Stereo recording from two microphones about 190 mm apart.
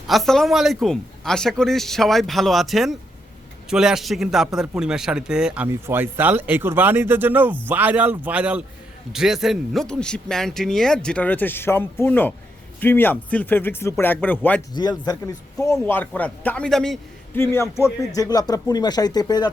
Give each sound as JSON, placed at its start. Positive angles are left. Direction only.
{"t": 0.1, "sound": "a man's voice", "side_deg": 0}
{"t": 14.7, "sound": "speech", "side_deg": 20}
{"t": 17.3, "sound": "speech", "side_deg": 15}